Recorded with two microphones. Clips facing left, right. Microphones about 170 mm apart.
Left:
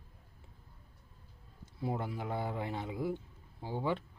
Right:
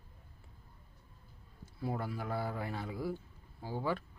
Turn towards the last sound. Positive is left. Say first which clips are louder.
# left 1 dB
turn(degrees=20)  # may be behind; listen again after turning